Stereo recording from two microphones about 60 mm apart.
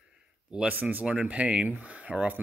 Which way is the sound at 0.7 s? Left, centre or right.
Right.